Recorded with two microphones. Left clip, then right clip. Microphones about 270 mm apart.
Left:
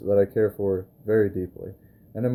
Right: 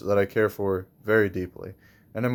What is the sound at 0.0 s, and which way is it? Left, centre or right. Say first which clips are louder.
Speech: left 2 dB; right.